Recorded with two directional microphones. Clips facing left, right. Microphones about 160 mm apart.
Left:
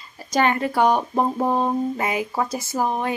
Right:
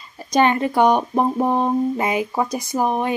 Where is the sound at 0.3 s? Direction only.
20° right (ahead or behind).